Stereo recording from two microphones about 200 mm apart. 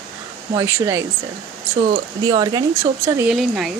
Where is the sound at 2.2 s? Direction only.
20° right (ahead or behind).